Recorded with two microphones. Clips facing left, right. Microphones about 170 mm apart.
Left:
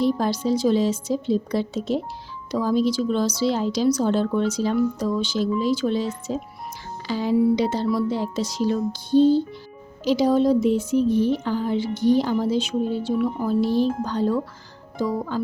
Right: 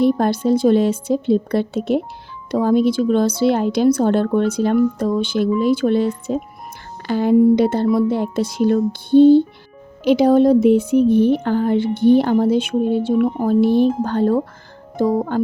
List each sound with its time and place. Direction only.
0.0 s a woman's voice: 55° right (ahead or behind)